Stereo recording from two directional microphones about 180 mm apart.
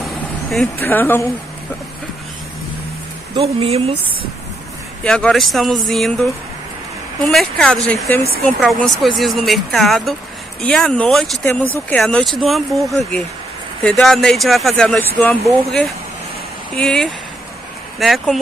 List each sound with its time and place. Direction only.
0.5 s a woman's voice: centre (ahead or behind)
3.3 s speech: 30° right (ahead or behind)
5.0 s speech: 5° left (ahead or behind)